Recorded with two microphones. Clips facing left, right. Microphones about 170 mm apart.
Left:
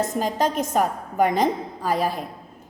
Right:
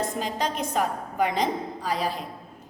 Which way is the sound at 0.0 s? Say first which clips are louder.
Left 5 dB; 45° left (ahead or behind).